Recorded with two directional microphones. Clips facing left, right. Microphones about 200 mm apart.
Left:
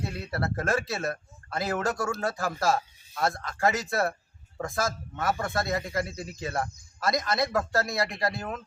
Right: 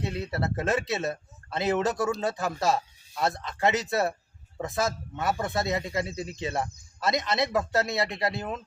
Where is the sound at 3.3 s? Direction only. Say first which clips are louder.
Right 1 dB; 20° right (ahead or behind).